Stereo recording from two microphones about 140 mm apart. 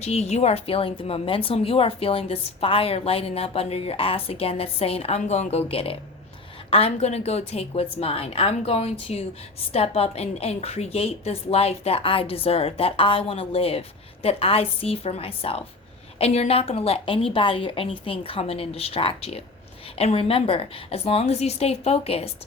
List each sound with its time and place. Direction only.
0.0 s a woman's voice: 50° left (ahead or behind)